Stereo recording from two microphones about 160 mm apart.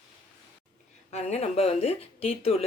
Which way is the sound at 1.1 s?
45° left (ahead or behind).